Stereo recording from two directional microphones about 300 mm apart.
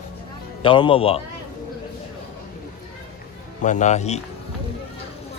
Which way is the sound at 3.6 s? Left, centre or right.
Left.